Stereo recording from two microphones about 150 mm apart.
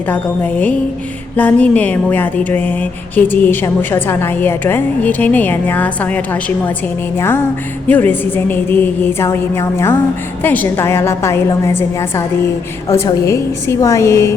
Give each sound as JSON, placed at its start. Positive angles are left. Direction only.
{"t": 0.1, "sound": "a woman's voice", "side_deg": 10}